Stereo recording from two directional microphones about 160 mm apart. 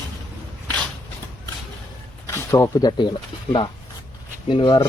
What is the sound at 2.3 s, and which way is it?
Speech, 15° left (ahead or behind).